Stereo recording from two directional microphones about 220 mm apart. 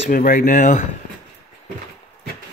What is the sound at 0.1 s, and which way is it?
Speech, 40° left (ahead or behind).